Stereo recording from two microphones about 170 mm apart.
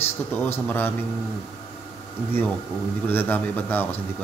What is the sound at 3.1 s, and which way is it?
Speech, 10° left (ahead or behind).